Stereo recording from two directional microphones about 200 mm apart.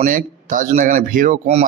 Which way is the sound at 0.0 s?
40° right (ahead or behind).